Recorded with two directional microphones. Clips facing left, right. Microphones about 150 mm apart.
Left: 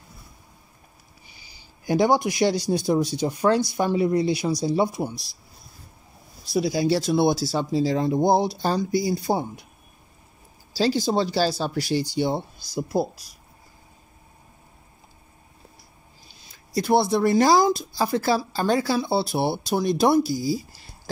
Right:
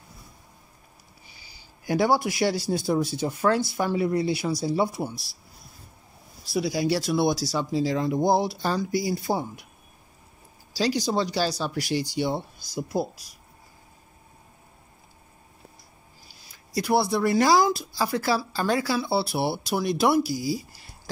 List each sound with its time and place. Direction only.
1.9 s speech: 20° left (ahead or behind)
6.5 s speech: 25° left (ahead or behind)
10.7 s speech: 30° left (ahead or behind)
16.3 s speech: 25° left (ahead or behind)